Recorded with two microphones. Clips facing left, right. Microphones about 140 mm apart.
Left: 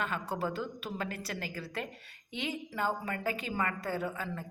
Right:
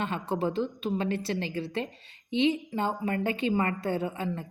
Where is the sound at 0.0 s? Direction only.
25° right (ahead or behind).